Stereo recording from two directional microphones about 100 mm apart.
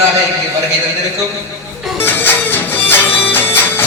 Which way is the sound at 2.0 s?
20° left (ahead or behind).